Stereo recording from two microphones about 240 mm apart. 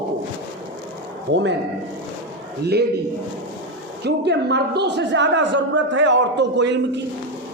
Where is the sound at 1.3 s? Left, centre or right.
Right.